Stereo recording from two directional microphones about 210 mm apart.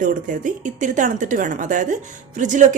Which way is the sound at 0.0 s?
40° right (ahead or behind).